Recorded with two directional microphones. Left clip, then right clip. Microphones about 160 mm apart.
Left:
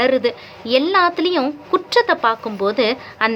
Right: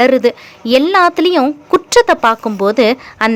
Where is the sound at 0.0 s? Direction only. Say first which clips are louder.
Right 6 dB; 40° right (ahead or behind).